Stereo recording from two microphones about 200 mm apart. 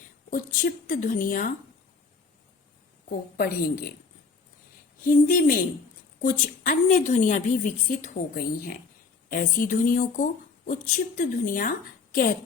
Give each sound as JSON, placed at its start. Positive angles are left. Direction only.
{"t": 0.3, "sound": "speech", "side_deg": 45}
{"t": 3.3, "sound": "speech", "side_deg": 50}
{"t": 5.0, "sound": "a woman's voice", "side_deg": 40}